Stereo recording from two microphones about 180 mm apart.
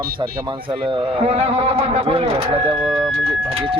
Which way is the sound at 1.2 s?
35° right (ahead or behind).